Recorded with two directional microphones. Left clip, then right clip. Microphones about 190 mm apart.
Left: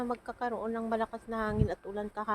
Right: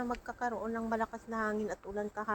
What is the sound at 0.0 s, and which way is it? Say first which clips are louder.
A woman's voice: left 2 dB; 20° left (ahead or behind).